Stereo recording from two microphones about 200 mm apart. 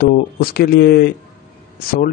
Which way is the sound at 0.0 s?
50° left (ahead or behind).